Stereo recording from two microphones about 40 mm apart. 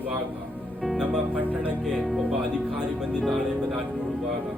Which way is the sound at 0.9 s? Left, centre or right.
Right.